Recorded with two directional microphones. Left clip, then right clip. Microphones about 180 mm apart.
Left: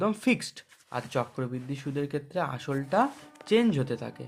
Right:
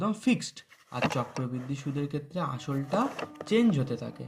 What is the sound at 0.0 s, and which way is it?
Speech, 30° left (ahead or behind).